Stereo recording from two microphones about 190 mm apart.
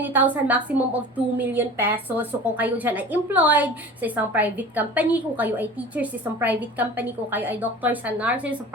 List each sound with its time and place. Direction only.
0.0 s a woman's voice: 10° right (ahead or behind)